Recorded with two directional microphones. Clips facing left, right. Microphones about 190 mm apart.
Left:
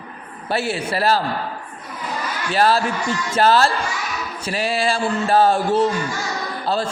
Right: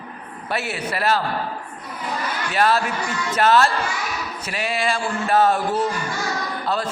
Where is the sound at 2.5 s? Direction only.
30° left (ahead or behind).